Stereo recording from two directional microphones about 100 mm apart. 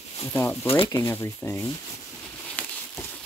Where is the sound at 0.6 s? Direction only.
70° left (ahead or behind).